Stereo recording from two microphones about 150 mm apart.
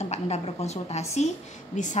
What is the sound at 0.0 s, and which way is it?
A woman's voice, 45° left (ahead or behind).